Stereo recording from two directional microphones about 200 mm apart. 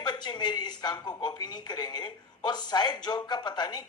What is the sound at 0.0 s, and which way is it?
Speech, 20° left (ahead or behind).